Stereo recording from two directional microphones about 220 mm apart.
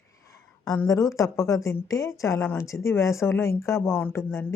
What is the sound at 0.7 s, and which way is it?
A woman's voice, 15° left (ahead or behind).